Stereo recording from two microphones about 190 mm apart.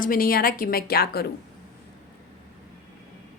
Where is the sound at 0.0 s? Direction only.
50° left (ahead or behind).